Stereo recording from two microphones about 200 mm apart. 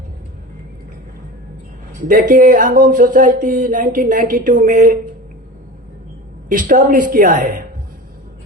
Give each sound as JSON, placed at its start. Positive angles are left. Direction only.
{"t": 2.0, "sound": "speech", "side_deg": -45}
{"t": 6.5, "sound": "speech", "side_deg": -45}